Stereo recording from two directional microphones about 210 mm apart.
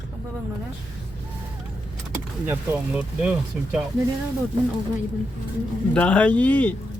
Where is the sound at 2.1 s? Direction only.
10° right (ahead or behind).